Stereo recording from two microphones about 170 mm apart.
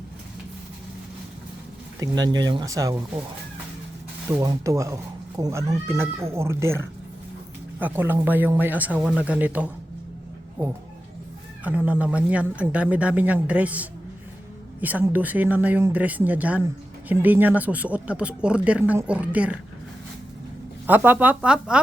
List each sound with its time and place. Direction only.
2.0 s speech: 25° right (ahead or behind)
4.3 s speech: 20° right (ahead or behind)
11.6 s speech: 10° right (ahead or behind)
20.8 s speech: 10° right (ahead or behind)